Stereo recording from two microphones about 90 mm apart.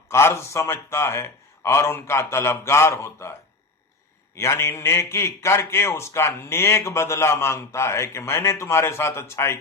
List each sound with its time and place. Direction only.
0.1 s a man's voice: 30° left (ahead or behind)
4.4 s a man's voice: 30° left (ahead or behind)